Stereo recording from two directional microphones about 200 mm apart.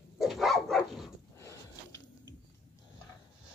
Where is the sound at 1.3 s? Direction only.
15° left (ahead or behind).